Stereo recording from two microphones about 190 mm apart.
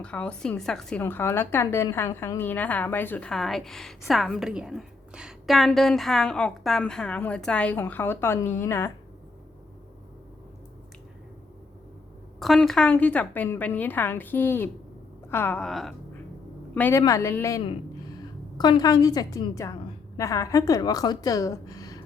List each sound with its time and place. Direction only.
0.0 s a woman's voice: 5° left (ahead or behind)
12.4 s a woman's voice: centre (ahead or behind); by 22.0 s 20° left (ahead or behind)